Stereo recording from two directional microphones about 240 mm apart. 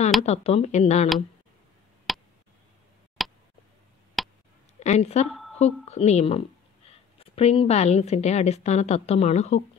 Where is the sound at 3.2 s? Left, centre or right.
Centre.